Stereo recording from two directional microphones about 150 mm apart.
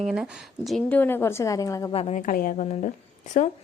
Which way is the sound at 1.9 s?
45° left (ahead or behind).